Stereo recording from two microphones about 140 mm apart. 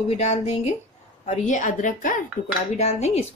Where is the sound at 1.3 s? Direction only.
65° left (ahead or behind).